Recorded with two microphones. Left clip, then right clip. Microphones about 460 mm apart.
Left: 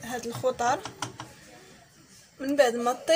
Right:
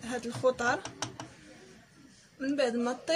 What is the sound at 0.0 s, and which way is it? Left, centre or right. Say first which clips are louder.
Speech: even; right.